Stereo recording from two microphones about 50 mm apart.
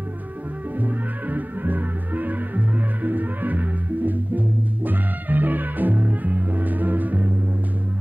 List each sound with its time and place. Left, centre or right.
0.7 s music: right